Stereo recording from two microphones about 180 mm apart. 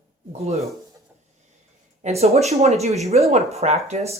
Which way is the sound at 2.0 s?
35° right (ahead or behind).